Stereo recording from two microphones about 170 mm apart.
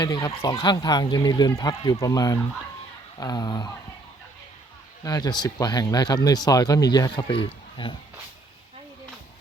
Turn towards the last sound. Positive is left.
turn(degrees=30)  # may be behind; listen again after turning